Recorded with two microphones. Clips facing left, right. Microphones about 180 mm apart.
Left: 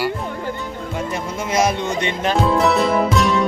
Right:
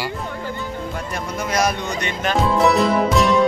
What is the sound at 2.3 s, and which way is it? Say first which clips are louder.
Music: even; centre (ahead or behind).